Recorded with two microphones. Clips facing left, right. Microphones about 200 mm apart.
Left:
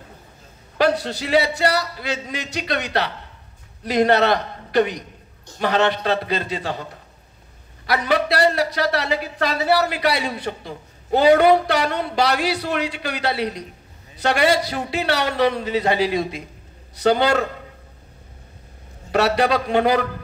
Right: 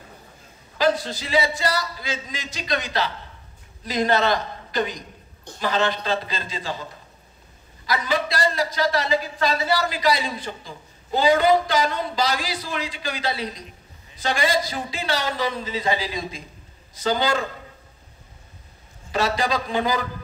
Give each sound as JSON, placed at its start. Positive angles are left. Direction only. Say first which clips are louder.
{"t": 0.7, "sound": "a man's voice", "louder": "left 2 dB", "side_deg": 65}
{"t": 19.1, "sound": "a man's voice", "louder": "left 5 dB", "side_deg": 65}